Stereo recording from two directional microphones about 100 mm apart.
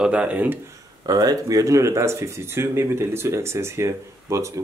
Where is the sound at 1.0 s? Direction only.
40° right (ahead or behind).